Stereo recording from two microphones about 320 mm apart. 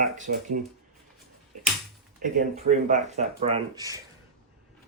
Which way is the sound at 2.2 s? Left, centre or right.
Right.